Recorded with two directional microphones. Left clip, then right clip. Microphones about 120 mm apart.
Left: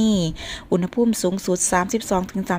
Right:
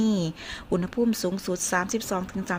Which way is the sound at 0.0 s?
35° left (ahead or behind).